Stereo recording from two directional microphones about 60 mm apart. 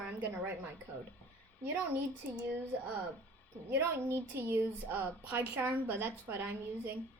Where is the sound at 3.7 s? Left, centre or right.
Right.